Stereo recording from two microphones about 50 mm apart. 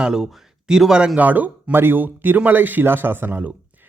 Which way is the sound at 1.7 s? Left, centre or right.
Right.